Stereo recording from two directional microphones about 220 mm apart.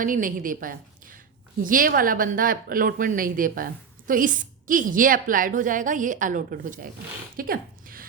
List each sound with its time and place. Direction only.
0.0 s a woman's voice: 40° right (ahead or behind)